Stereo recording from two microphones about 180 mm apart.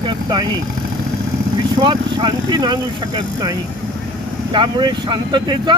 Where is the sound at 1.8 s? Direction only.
25° right (ahead or behind).